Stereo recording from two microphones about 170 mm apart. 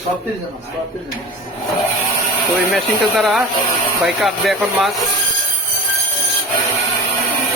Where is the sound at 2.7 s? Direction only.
Centre (ahead or behind).